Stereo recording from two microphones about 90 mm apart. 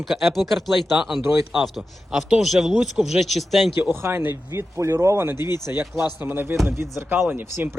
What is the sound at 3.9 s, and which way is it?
Speech, 25° right (ahead or behind).